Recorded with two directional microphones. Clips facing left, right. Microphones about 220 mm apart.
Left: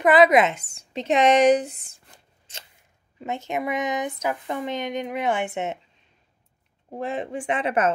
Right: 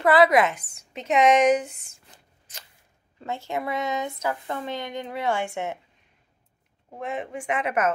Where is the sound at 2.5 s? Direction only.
30° left (ahead or behind).